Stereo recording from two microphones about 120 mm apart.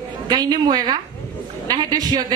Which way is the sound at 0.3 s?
35° right (ahead or behind).